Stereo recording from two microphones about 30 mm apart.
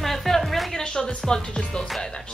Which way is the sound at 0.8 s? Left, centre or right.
Centre.